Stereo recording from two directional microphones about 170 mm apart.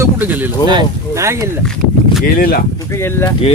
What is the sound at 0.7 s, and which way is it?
Speech, 20° right (ahead or behind).